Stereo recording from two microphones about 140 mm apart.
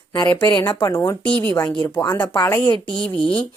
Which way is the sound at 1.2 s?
35° right (ahead or behind).